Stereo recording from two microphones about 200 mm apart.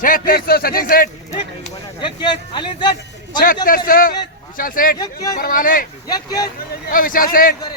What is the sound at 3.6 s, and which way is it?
Speech, 45° left (ahead or behind).